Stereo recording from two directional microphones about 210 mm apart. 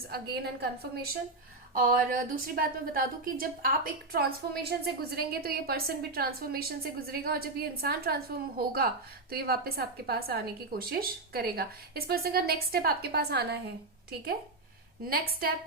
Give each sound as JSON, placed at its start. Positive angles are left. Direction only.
{"t": 0.1, "sound": "a woman's voice", "side_deg": -50}